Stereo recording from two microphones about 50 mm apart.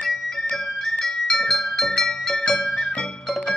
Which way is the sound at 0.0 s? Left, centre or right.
Centre.